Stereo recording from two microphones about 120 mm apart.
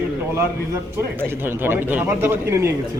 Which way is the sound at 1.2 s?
15° right (ahead or behind).